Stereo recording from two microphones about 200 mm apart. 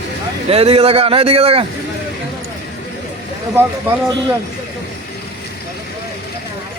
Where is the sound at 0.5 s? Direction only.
30° right (ahead or behind).